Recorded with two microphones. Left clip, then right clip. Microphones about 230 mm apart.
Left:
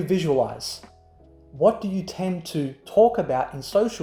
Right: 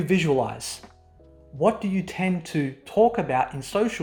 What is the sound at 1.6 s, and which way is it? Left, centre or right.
Speech, right.